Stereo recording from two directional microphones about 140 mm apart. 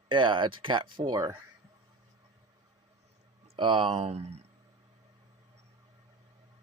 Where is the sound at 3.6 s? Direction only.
35° right (ahead or behind).